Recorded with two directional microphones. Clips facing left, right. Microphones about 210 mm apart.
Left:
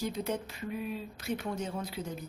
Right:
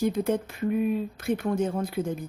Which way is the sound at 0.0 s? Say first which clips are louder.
Right 9 dB; 50° right (ahead or behind).